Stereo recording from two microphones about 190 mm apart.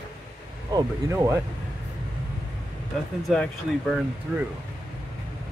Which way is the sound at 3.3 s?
Centre (ahead or behind).